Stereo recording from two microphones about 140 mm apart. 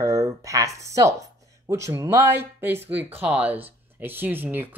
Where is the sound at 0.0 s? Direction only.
25° right (ahead or behind).